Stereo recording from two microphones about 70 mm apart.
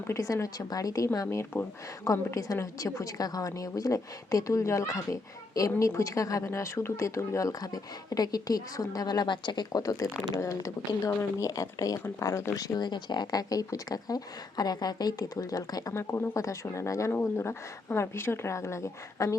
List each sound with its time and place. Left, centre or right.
0.1 s a woman's voice: left
5.9 s a woman's voice: left
6.4 s speech: left
9.8 s a woman's voice: left
12.2 s a woman's voice: left
12.5 s speech: left
15.9 s a woman's voice: left
17.1 s speech: left